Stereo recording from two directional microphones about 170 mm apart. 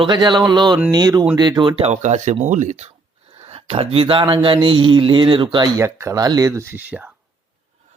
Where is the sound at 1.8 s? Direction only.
45° right (ahead or behind).